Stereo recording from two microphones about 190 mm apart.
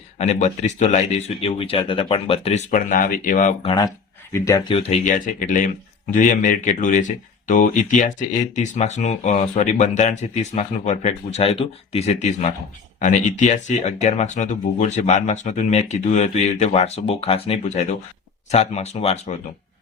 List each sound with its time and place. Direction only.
0.2 s speech: 35° left (ahead or behind)
3.6 s speech: 25° left (ahead or behind)
4.7 s speech: 35° left (ahead or behind)